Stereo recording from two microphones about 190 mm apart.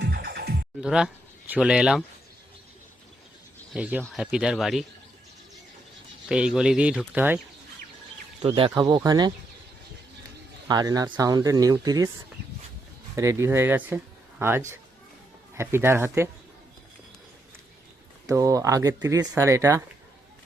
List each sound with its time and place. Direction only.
0.0 s music: 55° right (ahead or behind)
0.8 s speech: 5° right (ahead or behind)
3.7 s speech: 5° right (ahead or behind)
6.2 s speech: 5° right (ahead or behind)
8.4 s speech: 30° right (ahead or behind)
10.7 s speech: 20° right (ahead or behind)
13.1 s speech: 15° right (ahead or behind)
18.3 s speech: 20° right (ahead or behind)